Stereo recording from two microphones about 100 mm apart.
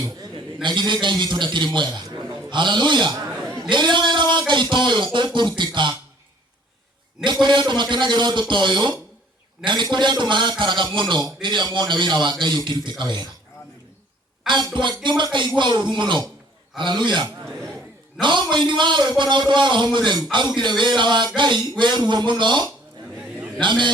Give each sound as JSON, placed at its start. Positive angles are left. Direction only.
{"t": 0.6, "sound": "a man's voice", "side_deg": -50}
{"t": 7.4, "sound": "a man's voice", "side_deg": -50}
{"t": 14.4, "sound": "a man's voice", "side_deg": -50}
{"t": 23.1, "sound": "chatter", "side_deg": -15}
{"t": 23.6, "sound": "a man's voice", "side_deg": -50}